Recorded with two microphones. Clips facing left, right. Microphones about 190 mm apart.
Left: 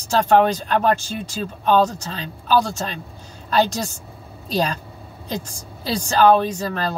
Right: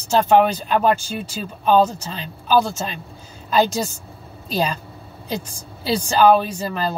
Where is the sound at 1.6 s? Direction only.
10° right (ahead or behind).